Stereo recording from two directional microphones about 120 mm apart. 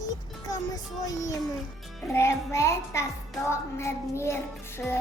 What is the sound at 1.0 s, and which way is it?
Child singing, 30° left (ahead or behind).